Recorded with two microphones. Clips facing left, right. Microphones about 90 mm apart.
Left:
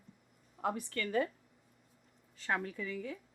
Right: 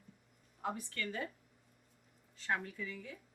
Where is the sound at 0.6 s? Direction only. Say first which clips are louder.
Left 4 dB; 65° left (ahead or behind).